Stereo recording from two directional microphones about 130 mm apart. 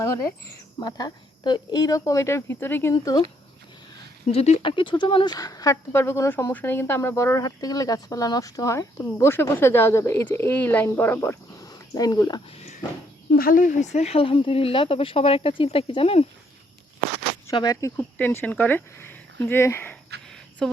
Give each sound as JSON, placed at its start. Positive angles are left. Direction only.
{"t": 0.8, "sound": "speech", "side_deg": 35}
{"t": 2.9, "sound": "speech", "side_deg": 30}
{"t": 4.3, "sound": "speech", "side_deg": 50}
{"t": 13.5, "sound": "speech", "side_deg": 90}
{"t": 17.5, "sound": "speech", "side_deg": 30}
{"t": 20.6, "sound": "speech", "side_deg": 5}